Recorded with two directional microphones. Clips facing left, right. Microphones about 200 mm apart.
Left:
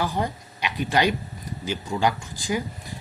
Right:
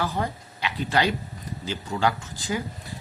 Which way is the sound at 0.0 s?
15° left (ahead or behind).